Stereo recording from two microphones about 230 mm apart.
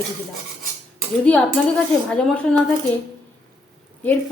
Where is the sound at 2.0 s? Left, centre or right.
Centre.